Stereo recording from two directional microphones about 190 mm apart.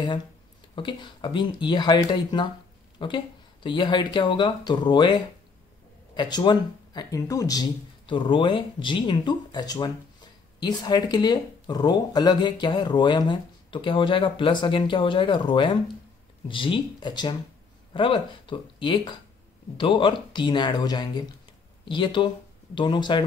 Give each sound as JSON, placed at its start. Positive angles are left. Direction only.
{"t": 0.7, "sound": "speech", "side_deg": 25}